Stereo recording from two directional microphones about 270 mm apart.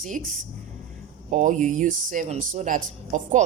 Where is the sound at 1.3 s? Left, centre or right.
Right.